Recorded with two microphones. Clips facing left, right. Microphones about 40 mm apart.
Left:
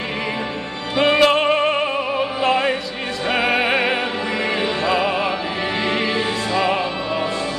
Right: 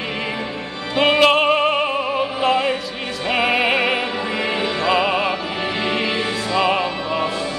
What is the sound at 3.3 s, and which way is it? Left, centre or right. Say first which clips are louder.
Music: right 1 dB; centre.